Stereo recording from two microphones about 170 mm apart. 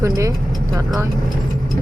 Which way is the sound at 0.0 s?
20° right (ahead or behind).